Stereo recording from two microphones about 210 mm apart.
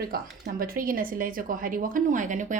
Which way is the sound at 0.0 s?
45° right (ahead or behind).